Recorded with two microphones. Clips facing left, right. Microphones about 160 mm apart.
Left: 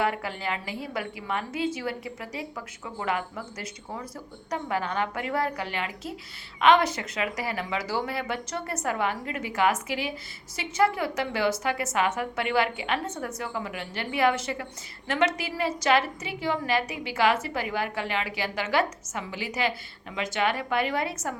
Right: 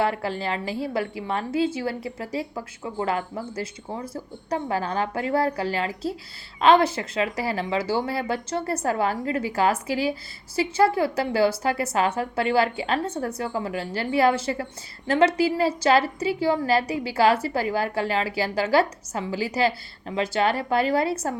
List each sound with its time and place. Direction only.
0.0 s a woman's voice: 30° right (ahead or behind)